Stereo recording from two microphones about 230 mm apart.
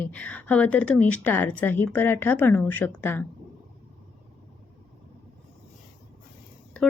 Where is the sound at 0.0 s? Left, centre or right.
Centre.